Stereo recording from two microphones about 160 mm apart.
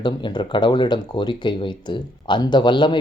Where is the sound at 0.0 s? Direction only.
30° left (ahead or behind).